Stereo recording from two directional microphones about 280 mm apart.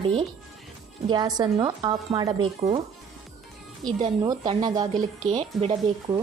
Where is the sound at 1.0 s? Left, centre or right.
Centre.